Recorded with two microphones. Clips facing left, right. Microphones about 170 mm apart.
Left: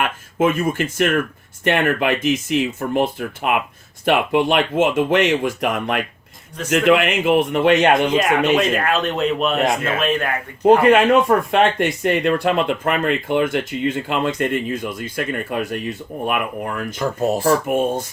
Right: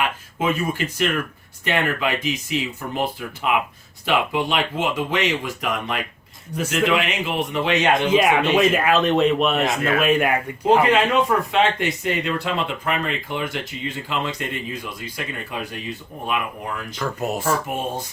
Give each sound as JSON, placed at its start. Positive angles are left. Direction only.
{"t": 0.3, "sound": "speech", "side_deg": 50}
{"t": 8.1, "sound": "speech", "side_deg": -5}
{"t": 10.0, "sound": "speech", "side_deg": -10}
{"t": 10.8, "sound": "speech", "side_deg": 50}
{"t": 17.0, "sound": "speech", "side_deg": 35}